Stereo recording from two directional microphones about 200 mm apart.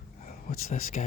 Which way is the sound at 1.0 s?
35° left (ahead or behind).